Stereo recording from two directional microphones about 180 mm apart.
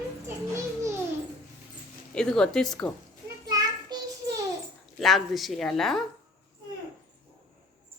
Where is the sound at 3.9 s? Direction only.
25° right (ahead or behind).